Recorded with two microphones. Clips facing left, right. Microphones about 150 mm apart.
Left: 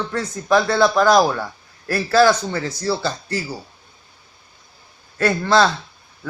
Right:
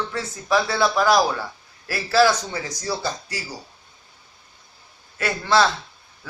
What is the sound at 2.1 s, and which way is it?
Speech, 60° left (ahead or behind).